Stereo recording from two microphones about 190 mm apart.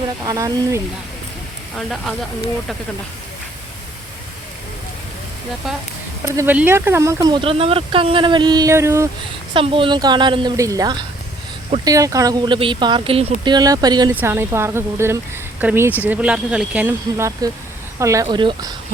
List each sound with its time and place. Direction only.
0.3 s speech: 15° right (ahead or behind)
1.7 s speech: centre (ahead or behind)
6.3 s speech: 10° right (ahead or behind)
9.5 s speech: 25° right (ahead or behind)